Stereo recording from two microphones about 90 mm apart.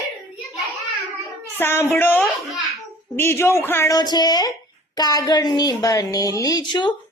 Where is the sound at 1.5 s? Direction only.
25° left (ahead or behind).